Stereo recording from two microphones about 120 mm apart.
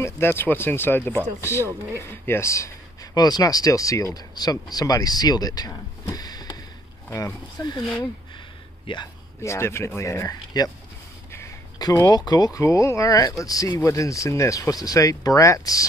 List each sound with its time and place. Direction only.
0.0 s speech: 20° left (ahead or behind)
7.1 s speech: 20° left (ahead or behind)
8.8 s speech: 40° left (ahead or behind)
9.4 s speech: 20° left (ahead or behind)